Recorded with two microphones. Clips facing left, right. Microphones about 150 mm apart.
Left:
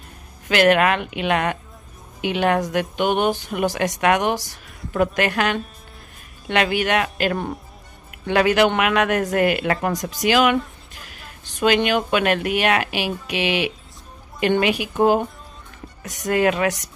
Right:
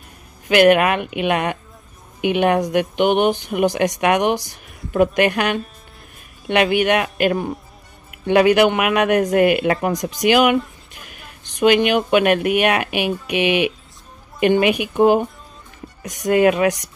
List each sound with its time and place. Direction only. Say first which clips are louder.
0.5 s speech: right 3 dB; 15° right (ahead or behind)